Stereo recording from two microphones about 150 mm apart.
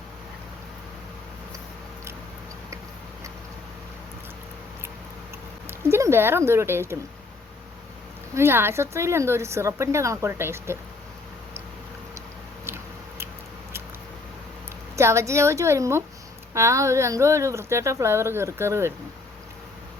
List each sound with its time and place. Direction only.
5.6 s speech: 15° right (ahead or behind)
8.4 s a woman's voice: 15° right (ahead or behind)
12.6 s biting: 15° right (ahead or behind)
14.9 s speech: 20° right (ahead or behind)